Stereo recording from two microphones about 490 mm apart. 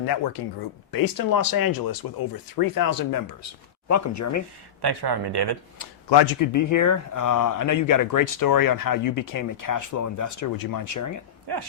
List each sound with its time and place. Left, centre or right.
0.4 s speech: left
4.8 s speech: right
5.8 s speech: left
6.4 s speech: left
11.5 s speech: right